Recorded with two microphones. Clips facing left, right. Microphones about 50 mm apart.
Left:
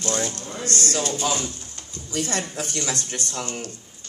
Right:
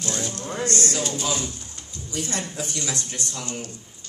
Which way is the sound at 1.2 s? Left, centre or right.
Left.